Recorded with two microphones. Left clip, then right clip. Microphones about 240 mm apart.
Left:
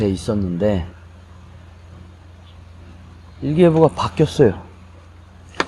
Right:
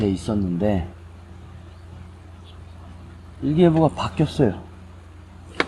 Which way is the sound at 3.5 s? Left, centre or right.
Left.